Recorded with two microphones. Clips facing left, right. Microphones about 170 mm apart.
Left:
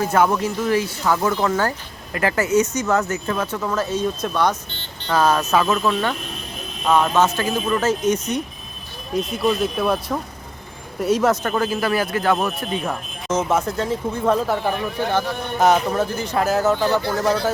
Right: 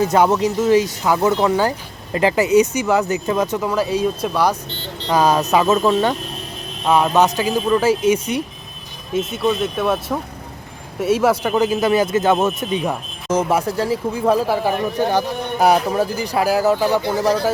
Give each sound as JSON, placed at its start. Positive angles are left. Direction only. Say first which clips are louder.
{"t": 0.1, "sound": "speech", "louder": "right 3 dB", "side_deg": -20}
{"t": 6.8, "sound": "speech", "louder": "right 2 dB", "side_deg": -10}